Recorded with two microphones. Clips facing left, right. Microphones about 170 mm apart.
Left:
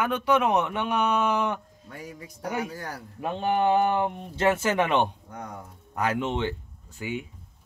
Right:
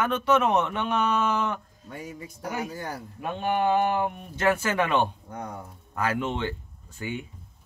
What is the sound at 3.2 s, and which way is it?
Speech, 25° left (ahead or behind).